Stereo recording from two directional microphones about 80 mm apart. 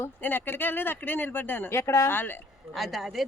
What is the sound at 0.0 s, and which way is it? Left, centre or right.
Speech, left.